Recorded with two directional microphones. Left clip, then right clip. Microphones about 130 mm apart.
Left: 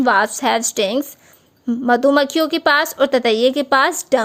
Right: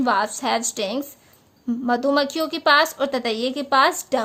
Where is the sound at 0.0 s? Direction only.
50° left (ahead or behind).